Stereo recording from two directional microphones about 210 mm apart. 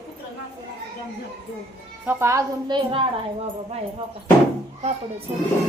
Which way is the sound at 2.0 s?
15° right (ahead or behind).